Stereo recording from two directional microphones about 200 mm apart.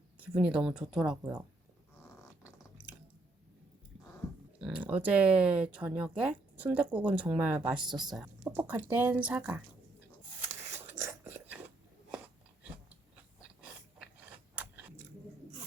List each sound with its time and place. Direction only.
0.2 s speech: 5° right (ahead or behind)
1.2 s speech: 15° right (ahead or behind)
4.6 s speech: 5° right (ahead or behind)
7.9 s speech: 20° right (ahead or behind)
8.1 s speech: 10° right (ahead or behind)
10.5 s a sound: 10° right (ahead or behind)
14.3 s mechanisms: 5° right (ahead or behind)